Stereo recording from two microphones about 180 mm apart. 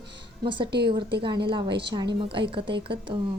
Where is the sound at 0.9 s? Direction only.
25° right (ahead or behind).